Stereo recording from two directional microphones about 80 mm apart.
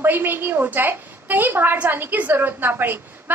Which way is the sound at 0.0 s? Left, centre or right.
Right.